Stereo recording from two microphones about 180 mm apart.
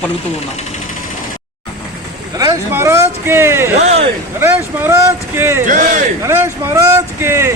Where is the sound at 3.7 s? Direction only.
40° right (ahead or behind).